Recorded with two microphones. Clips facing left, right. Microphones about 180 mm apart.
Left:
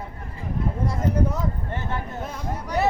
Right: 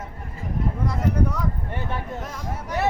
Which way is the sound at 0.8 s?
25° left (ahead or behind).